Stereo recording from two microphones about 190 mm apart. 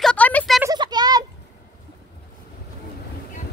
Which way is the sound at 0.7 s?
20° right (ahead or behind).